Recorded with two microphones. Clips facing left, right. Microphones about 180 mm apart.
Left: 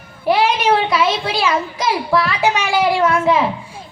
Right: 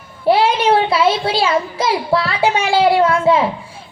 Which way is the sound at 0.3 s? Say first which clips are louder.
Right 2 dB; 30° right (ahead or behind).